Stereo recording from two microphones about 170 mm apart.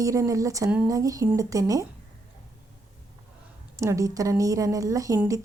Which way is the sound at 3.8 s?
20° right (ahead or behind).